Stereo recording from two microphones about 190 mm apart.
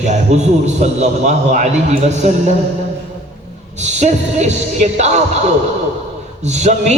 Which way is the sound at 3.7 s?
40° right (ahead or behind).